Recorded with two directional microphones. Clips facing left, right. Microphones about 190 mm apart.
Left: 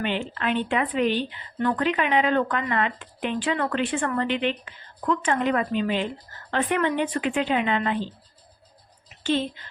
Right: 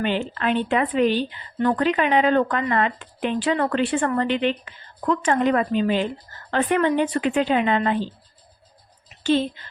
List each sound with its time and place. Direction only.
0.0 s speech: 40° right (ahead or behind)